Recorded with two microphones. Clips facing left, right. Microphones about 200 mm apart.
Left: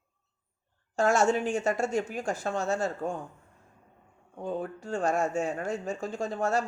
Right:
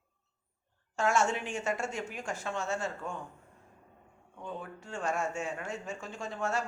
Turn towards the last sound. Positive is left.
turn(degrees=40)  # may be behind; listen again after turning